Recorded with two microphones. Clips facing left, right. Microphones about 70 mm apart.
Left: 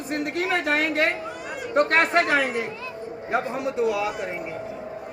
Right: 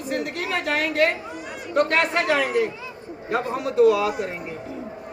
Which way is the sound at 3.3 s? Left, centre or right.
Centre.